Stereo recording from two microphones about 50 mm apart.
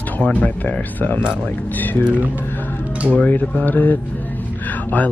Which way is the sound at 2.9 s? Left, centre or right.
Right.